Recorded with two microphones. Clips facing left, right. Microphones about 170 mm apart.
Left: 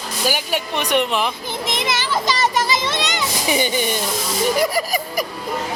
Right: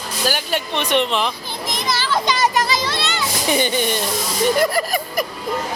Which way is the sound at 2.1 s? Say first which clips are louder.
Right 2 dB; centre (ahead or behind).